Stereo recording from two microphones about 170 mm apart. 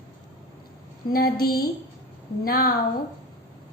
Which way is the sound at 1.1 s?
60° left (ahead or behind).